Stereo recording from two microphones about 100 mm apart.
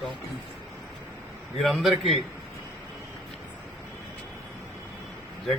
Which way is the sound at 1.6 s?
Centre (ahead or behind).